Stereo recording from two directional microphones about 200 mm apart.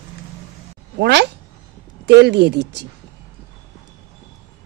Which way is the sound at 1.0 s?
55° right (ahead or behind).